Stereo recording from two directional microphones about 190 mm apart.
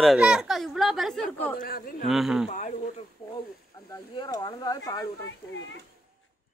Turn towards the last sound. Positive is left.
turn(degrees=20)  # may be behind; listen again after turning